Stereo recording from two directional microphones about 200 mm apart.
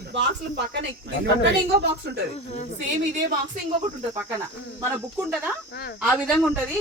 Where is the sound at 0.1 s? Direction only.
60° right (ahead or behind).